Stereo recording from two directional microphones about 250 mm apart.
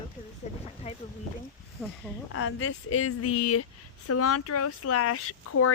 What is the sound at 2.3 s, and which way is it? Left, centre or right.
Speech, left.